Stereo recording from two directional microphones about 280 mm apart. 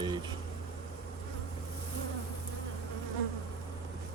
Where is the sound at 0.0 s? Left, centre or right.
Centre.